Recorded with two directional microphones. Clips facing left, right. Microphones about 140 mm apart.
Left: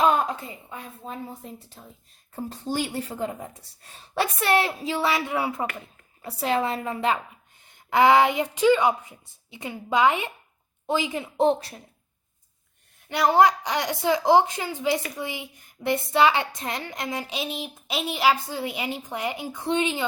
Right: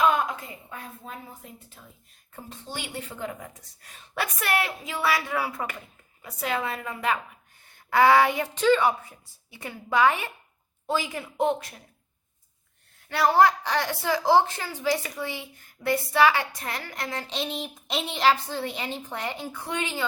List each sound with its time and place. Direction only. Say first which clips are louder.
0.0 s a sound: left 2 dB; 35° left (ahead or behind)
1.0 s a woman's voice: left 5 dB; 30° left (ahead or behind)
13.1 s a woman's voice: left 1 dB; 20° left (ahead or behind)